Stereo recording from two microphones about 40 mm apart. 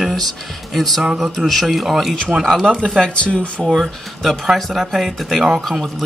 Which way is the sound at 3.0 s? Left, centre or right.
Left.